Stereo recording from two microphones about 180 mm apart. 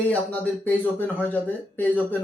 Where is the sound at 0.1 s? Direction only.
10° left (ahead or behind).